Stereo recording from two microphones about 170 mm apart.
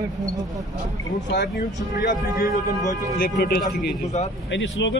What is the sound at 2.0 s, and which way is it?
Speech, 50° left (ahead or behind).